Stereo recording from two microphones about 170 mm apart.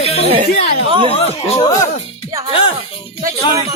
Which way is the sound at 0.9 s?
30° right (ahead or behind).